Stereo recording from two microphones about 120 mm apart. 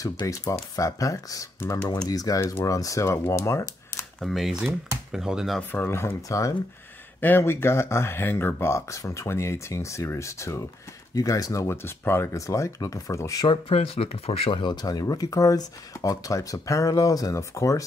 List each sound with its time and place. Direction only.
0.0 s speech: 30° left (ahead or behind)
4.2 s speech: centre (ahead or behind)
5.6 s speech: 15° left (ahead or behind)
7.2 s speech: 15° left (ahead or behind)
13.5 s speech: 55° left (ahead or behind); by 17.8 s 25° left (ahead or behind)